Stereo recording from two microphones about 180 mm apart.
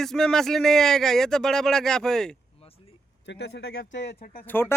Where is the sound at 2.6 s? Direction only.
30° left (ahead or behind).